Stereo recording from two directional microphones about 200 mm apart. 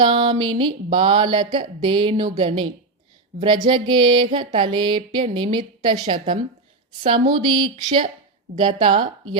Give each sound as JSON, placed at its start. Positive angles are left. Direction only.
{"t": 0.0, "sound": "music", "side_deg": -25}